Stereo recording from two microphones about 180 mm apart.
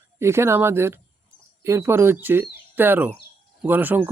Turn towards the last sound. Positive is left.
turn(degrees=-10)  # may be behind; listen again after turning